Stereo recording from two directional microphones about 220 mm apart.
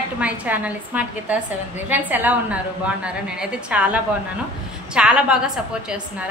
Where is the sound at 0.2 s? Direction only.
5° right (ahead or behind).